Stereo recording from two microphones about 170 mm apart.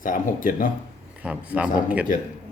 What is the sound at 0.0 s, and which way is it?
Speech, 50° left (ahead or behind).